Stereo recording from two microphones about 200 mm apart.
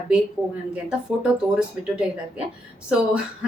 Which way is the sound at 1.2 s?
5° right (ahead or behind).